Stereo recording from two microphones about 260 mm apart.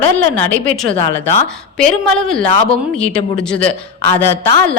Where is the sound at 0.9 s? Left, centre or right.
Left.